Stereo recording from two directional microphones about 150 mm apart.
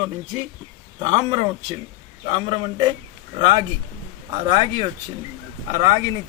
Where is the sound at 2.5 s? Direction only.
30° right (ahead or behind).